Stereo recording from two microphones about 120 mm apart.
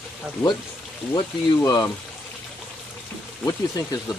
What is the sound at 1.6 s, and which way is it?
Speech, 35° left (ahead or behind).